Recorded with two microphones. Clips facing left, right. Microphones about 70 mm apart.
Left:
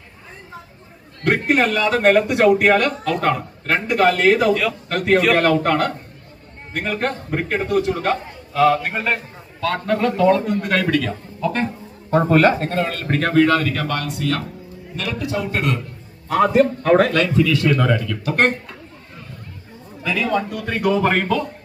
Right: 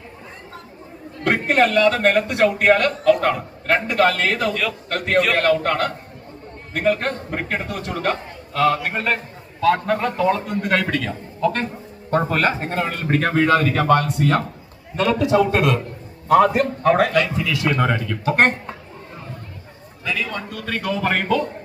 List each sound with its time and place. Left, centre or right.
1.2 s a man's voice: centre
12.5 s speech: centre; by 14.4 s right
16.3 s a man's voice: centre
18.3 s speech: centre
20.3 s speech: centre
21.1 s a man's voice: centre